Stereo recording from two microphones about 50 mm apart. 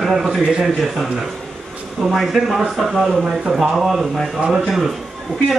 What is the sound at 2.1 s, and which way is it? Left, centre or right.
A man's voice, centre.